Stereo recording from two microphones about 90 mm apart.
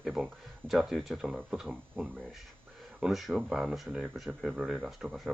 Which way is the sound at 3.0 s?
Centre (ahead or behind).